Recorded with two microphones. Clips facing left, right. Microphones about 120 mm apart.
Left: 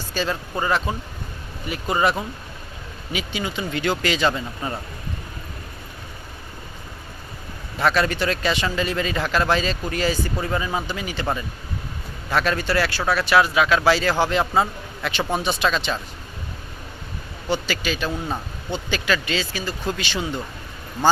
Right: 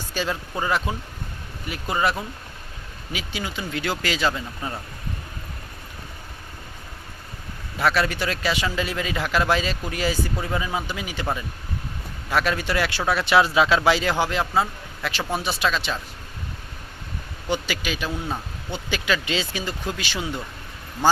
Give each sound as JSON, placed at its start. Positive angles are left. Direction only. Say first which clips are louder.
{"t": 0.1, "sound": "speech", "louder": "left 2 dB", "side_deg": -10}
{"t": 7.8, "sound": "a man's voice", "louder": "left 2 dB", "side_deg": -5}
{"t": 12.3, "sound": "a man's voice", "louder": "left 2 dB", "side_deg": -10}
{"t": 14.3, "sound": "speech", "louder": "left 3 dB", "side_deg": 0}
{"t": 17.5, "sound": "a man's voice", "louder": "left 2 dB", "side_deg": -15}
{"t": 19.9, "sound": "speech", "louder": "left 4 dB", "side_deg": -5}